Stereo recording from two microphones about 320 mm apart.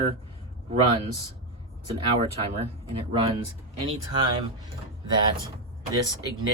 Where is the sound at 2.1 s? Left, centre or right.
Centre.